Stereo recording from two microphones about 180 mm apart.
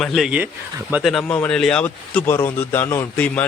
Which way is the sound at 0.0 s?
Centre (ahead or behind).